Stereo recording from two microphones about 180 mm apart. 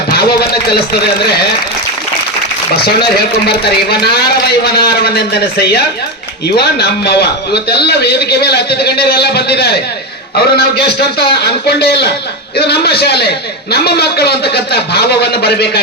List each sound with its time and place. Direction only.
0.1 s speech: 60° left (ahead or behind)
3.6 s a man's voice: 65° left (ahead or behind)